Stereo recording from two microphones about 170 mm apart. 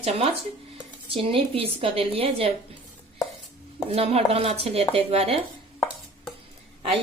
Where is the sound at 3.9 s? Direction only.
35° right (ahead or behind).